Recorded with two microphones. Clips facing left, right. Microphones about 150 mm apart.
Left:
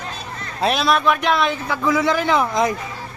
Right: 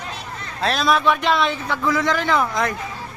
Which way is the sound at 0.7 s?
5° left (ahead or behind).